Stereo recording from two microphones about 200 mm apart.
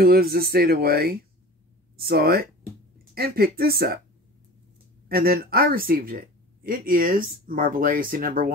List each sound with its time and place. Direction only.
0.0 s speech: 50° right (ahead or behind)
5.0 s speech: 50° right (ahead or behind)